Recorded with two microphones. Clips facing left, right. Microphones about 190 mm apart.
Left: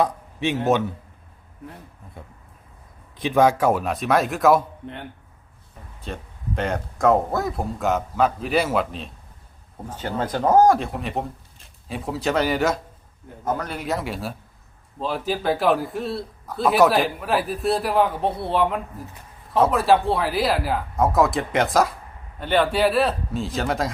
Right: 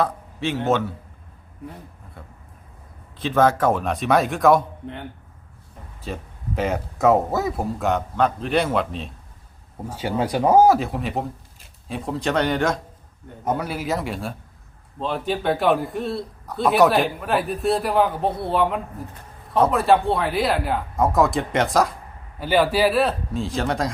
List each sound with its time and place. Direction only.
0.0 s a man's voice: 15° left (ahead or behind)
3.2 s a man's voice: 15° left (ahead or behind)
6.1 s a man's voice: 5° right (ahead or behind)
9.7 s a man's voice: 10° right (ahead or behind)